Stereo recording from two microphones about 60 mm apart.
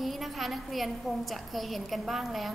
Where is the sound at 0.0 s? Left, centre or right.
Centre.